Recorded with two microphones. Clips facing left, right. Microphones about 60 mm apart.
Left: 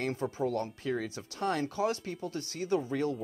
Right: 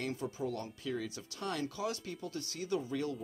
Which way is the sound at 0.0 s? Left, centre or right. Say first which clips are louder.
Left 5 dB; left.